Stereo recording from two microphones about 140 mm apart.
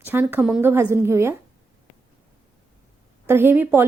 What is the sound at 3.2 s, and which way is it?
Speech, 15° right (ahead or behind).